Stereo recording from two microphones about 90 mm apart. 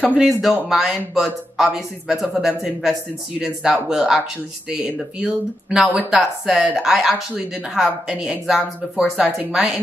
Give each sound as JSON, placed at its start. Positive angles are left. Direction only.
{"t": 0.2, "sound": "speech", "side_deg": 0}
{"t": 9.2, "sound": "speech", "side_deg": -15}